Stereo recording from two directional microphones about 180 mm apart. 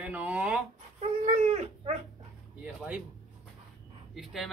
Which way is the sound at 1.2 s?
40° right (ahead or behind).